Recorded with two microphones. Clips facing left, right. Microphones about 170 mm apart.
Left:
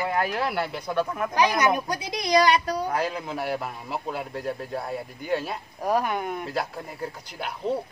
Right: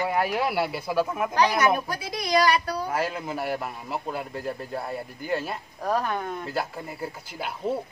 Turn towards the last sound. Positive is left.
turn(degrees=-5)  # may be behind; listen again after turning